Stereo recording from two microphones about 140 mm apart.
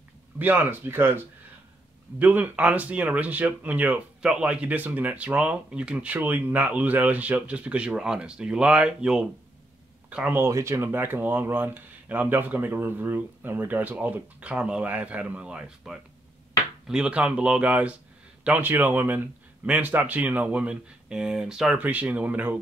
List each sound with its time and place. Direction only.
0.4 s speech: 15° right (ahead or behind)